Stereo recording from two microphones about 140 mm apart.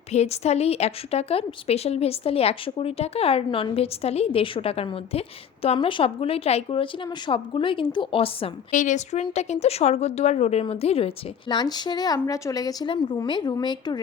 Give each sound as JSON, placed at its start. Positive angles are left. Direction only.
{"t": 0.1, "sound": "a woman's voice", "side_deg": 50}
{"t": 8.7, "sound": "a woman's voice", "side_deg": 65}